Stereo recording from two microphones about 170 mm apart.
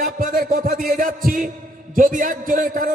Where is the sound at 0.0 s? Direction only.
55° right (ahead or behind).